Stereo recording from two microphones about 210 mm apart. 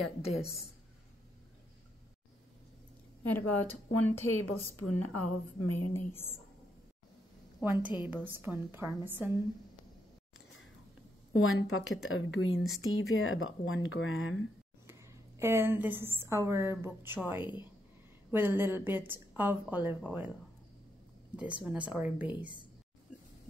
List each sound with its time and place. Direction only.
0.0 s a woman's voice: centre (ahead or behind)
3.3 s a woman's voice: 10° left (ahead or behind)
4.4 s a woman's voice: 90° left
5.8 s a woman's voice: 10° left (ahead or behind)
7.6 s a woman's voice: 10° right (ahead or behind)
11.4 s speech: 75° left (ahead or behind)
14.9 s a woman's voice: 15° right (ahead or behind)
21.6 s a woman's voice: 5° right (ahead or behind)